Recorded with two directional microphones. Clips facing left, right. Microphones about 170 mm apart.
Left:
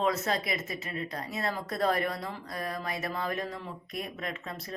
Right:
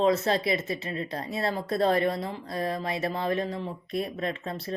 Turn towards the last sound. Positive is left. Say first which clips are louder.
# right 6 dB
turn(degrees=-30)  # may be behind; listen again after turning